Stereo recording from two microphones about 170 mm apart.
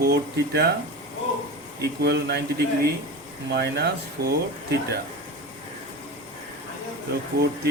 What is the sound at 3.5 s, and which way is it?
Speech, 75° right (ahead or behind).